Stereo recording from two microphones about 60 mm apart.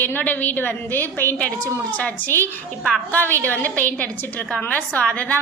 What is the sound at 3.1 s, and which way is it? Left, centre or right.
A woman's voice, left.